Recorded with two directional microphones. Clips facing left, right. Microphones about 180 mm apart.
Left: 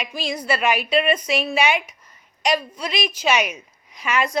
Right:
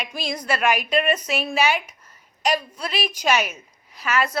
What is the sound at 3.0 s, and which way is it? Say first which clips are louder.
Speech: left 1 dB; 10° right (ahead or behind).